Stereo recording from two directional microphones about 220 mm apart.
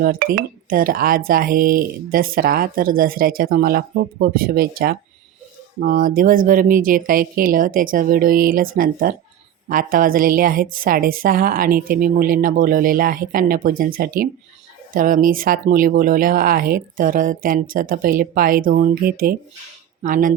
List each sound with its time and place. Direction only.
0.0 s speech: 40° right (ahead or behind)